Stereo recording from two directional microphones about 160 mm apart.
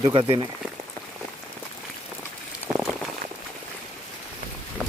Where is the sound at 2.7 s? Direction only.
10° right (ahead or behind).